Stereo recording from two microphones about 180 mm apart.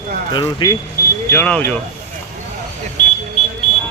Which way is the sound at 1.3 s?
10° left (ahead or behind).